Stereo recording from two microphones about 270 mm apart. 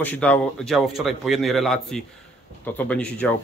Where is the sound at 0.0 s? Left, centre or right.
Centre.